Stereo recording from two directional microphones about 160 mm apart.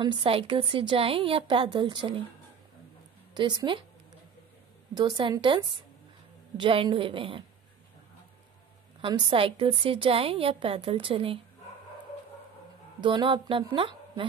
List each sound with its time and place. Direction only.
0.0 s a woman's voice: 30° right (ahead or behind)
3.3 s a woman's voice: 30° right (ahead or behind)
4.9 s a woman's voice: 30° right (ahead or behind)
9.0 s a woman's voice: 30° right (ahead or behind)
13.0 s a woman's voice: 30° right (ahead or behind)